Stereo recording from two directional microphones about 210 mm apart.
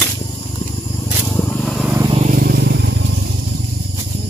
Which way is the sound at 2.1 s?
30° right (ahead or behind).